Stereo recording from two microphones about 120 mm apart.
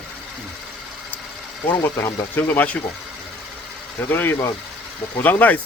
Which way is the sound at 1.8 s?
20° left (ahead or behind).